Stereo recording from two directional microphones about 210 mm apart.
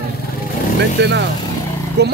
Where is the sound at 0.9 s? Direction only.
55° right (ahead or behind).